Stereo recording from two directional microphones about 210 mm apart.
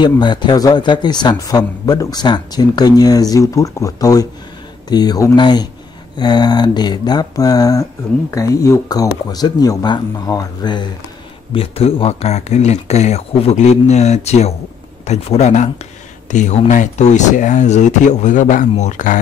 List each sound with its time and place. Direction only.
0.0 s speech: 20° left (ahead or behind); by 19.1 s 35° left (ahead or behind)